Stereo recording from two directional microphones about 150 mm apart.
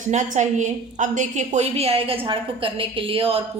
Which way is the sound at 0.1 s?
50° right (ahead or behind).